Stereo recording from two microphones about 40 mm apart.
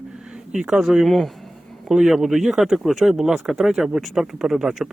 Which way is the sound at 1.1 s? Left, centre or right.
Centre.